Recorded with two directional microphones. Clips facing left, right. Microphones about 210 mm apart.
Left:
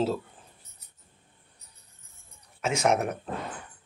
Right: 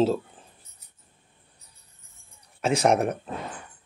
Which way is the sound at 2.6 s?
35° right (ahead or behind).